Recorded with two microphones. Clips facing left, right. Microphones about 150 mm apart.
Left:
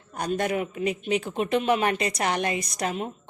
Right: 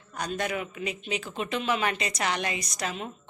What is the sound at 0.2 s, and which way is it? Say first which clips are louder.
A woman's voice: left 5 dB; 50° left (ahead or behind).